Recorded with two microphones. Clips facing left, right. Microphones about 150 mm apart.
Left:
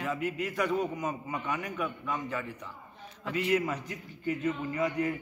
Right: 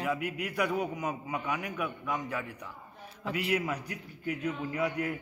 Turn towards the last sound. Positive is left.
turn(degrees=-10)  # may be behind; listen again after turning